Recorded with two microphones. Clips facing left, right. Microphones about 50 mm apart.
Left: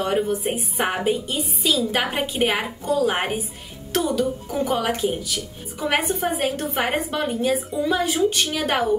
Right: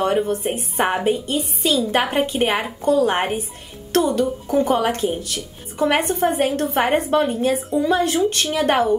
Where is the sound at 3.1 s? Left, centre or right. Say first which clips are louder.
Right 3 dB; centre.